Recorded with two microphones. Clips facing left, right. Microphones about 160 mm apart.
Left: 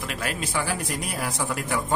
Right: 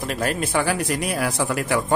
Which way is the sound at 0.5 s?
65° right (ahead or behind).